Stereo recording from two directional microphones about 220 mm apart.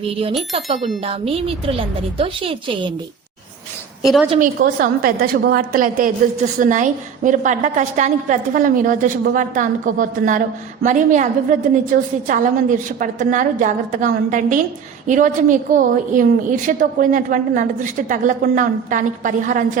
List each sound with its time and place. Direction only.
1.0 s a woman's voice: 25° right (ahead or behind)
4.0 s a woman's voice: centre (ahead or behind)
4.6 s a woman's voice: 45° right (ahead or behind)